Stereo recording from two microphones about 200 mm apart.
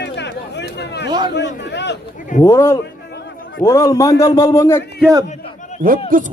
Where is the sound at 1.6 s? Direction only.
60° left (ahead or behind).